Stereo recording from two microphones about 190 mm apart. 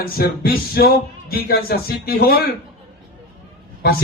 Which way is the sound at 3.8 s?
55° left (ahead or behind).